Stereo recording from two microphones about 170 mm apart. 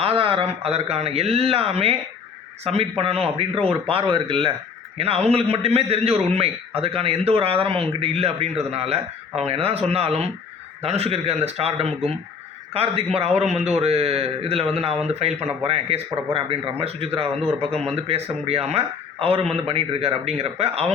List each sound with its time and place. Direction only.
0.0 s a man's voice: 35° right (ahead or behind)